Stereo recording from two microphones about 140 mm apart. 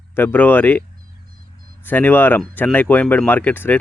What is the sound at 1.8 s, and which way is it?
Speech, 15° left (ahead or behind).